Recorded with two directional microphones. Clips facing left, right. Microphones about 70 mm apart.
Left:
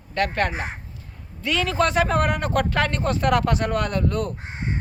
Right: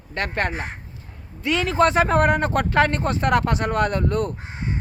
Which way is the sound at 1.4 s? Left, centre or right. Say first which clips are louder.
Right 3 dB; right.